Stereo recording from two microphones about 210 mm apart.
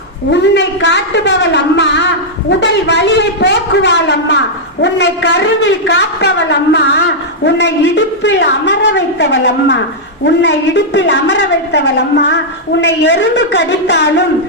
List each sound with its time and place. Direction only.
0.3 s a man's voice: 55° left (ahead or behind)